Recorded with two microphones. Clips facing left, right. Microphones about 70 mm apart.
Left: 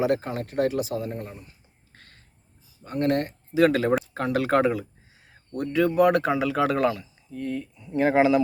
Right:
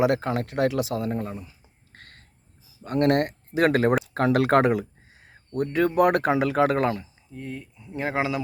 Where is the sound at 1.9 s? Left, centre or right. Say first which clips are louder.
Right 4 dB; right.